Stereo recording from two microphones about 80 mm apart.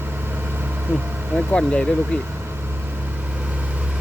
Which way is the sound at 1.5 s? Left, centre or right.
Centre.